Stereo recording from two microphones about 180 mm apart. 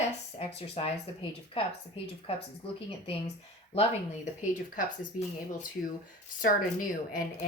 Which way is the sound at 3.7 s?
35° left (ahead or behind).